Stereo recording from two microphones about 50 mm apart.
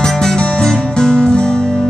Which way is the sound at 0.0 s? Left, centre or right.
Centre.